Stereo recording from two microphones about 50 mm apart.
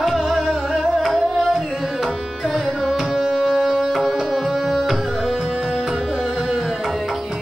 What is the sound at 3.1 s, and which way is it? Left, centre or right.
Tabla, centre.